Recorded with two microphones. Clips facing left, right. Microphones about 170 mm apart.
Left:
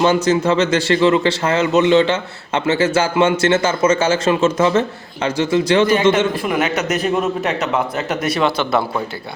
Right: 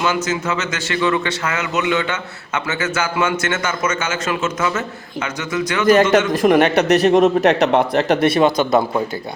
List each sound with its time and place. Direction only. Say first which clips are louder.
0.0 s a man's voice: left 6 dB; 30° left (ahead or behind)
5.8 s a man's voice: right 1 dB; 45° right (ahead or behind)
6.6 s speech: right 5 dB; 60° right (ahead or behind)
7.2 s a man's voice: right 6 dB; 75° right (ahead or behind)
8.0 s speech: right 4 dB; 30° right (ahead or behind)